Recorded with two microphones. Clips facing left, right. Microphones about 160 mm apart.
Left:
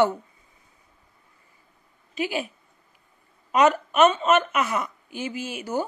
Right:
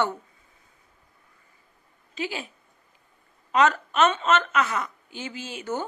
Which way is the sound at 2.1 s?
15° left (ahead or behind).